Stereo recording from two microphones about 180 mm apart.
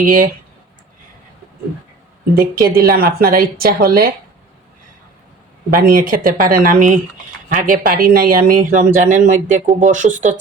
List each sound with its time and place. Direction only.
0.0 s speech: 50° right (ahead or behind)
2.3 s a woman's voice: 55° right (ahead or behind)
5.7 s speech: 55° right (ahead or behind)